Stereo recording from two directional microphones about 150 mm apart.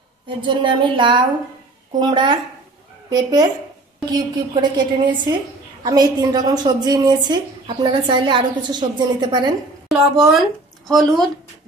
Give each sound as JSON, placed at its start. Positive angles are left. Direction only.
{"t": 0.4, "sound": "a woman's voice", "side_deg": -30}
{"t": 4.6, "sound": "a woman's voice", "side_deg": -30}
{"t": 9.8, "sound": "speech", "side_deg": 0}